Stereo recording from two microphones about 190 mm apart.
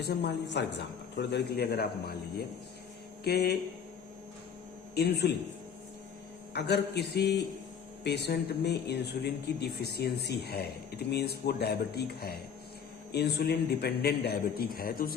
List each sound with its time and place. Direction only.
0.0 s a man's voice: 60° left (ahead or behind)
3.2 s a man's voice: 55° left (ahead or behind)
4.9 s a man's voice: 60° left (ahead or behind)
6.5 s a man's voice: 60° left (ahead or behind)